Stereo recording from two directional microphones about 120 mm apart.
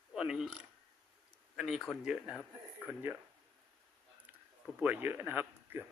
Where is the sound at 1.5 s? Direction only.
Centre (ahead or behind).